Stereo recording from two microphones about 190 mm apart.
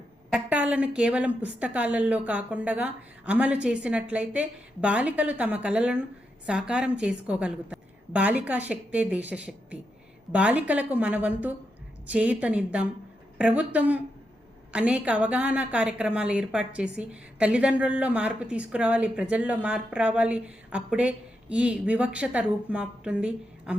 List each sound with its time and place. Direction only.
0.3 s a woman's voice: 5° right (ahead or behind)